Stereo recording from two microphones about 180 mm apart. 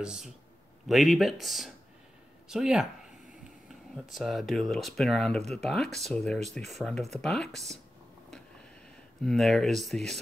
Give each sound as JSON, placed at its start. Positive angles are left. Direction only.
{"t": 0.0, "sound": "speech", "side_deg": -5}
{"t": 4.1, "sound": "speech", "side_deg": 0}
{"t": 9.2, "sound": "speech", "side_deg": 0}